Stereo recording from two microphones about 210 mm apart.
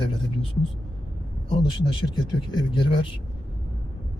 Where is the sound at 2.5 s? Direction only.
25° left (ahead or behind).